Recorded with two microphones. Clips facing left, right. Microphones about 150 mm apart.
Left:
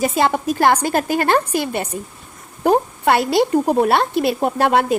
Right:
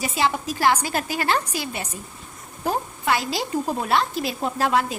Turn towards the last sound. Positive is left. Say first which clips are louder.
# left 6 dB
turn(degrees=65)  # may be behind; listen again after turning